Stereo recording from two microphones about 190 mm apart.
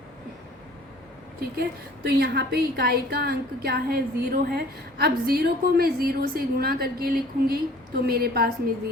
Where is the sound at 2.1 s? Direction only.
55° right (ahead or behind).